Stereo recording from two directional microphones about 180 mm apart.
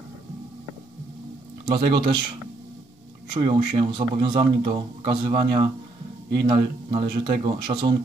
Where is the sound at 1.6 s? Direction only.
25° right (ahead or behind).